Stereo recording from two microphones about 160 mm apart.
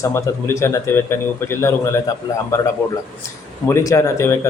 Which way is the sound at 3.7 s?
20° left (ahead or behind).